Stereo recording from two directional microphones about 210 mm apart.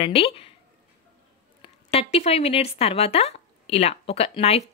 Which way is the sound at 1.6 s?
30° left (ahead or behind).